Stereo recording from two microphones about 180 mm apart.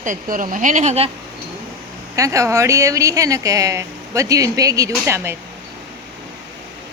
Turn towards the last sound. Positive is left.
turn(degrees=-15)  # may be behind; listen again after turning